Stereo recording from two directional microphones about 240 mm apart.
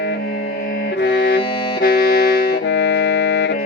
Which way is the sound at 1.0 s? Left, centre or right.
Left.